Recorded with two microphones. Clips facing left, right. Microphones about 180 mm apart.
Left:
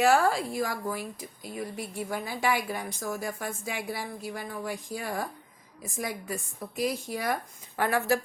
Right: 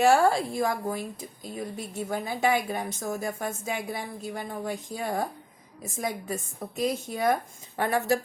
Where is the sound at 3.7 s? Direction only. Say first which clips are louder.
Right 1 dB; 50° right (ahead or behind).